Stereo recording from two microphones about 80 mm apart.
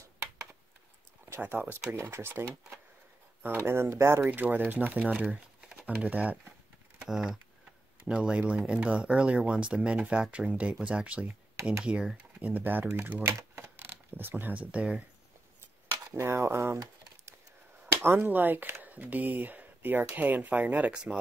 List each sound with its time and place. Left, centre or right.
1.3 s speech: right
4.3 s speech: right
5.2 s crumpling: centre
5.9 s speech: centre
7.1 s speech: centre
12.4 s speech: right
13.2 s speech: right; by 15.0 s centre
16.2 s speech: right
18.0 s speech: right